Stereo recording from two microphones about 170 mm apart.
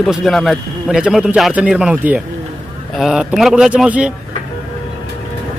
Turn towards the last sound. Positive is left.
turn(degrees=-5)  # may be behind; listen again after turning